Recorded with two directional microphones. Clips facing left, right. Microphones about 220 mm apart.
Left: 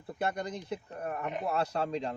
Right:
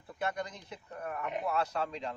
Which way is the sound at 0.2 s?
35° left (ahead or behind).